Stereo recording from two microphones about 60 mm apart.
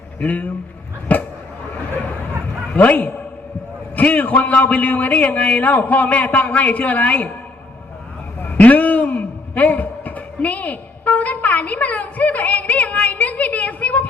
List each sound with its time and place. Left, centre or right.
0.2 s a man's voice: left
1.1 s a sound: left
2.7 s a man's voice: left
8.4 s a man's voice: left